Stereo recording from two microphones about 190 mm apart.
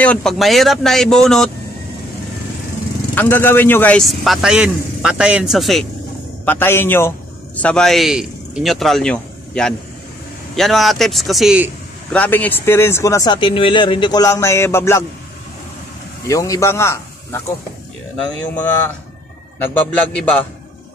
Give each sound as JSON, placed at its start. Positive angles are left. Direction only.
{"t": 0.0, "sound": "a man's voice", "side_deg": 5}
{"t": 3.2, "sound": "a man's voice", "side_deg": 10}
{"t": 6.4, "sound": "a man's voice", "side_deg": 10}
{"t": 12.1, "sound": "speech", "side_deg": 10}
{"t": 16.3, "sound": "speech", "side_deg": 15}
{"t": 19.6, "sound": "a man's voice", "side_deg": 5}